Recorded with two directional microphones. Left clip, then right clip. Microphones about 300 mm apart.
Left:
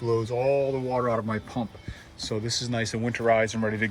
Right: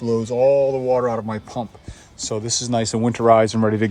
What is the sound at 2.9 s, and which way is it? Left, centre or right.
Speech, right.